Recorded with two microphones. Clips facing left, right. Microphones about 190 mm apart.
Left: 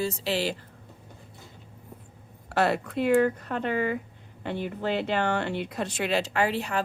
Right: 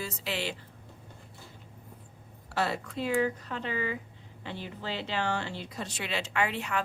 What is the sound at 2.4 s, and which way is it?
A woman's voice, 60° left (ahead or behind).